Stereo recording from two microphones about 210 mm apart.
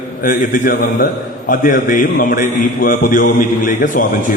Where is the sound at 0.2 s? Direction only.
40° left (ahead or behind).